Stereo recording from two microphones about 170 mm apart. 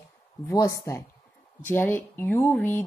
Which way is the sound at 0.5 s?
20° left (ahead or behind).